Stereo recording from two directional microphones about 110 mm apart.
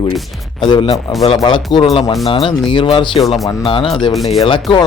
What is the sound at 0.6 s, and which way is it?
Speech, 55° left (ahead or behind).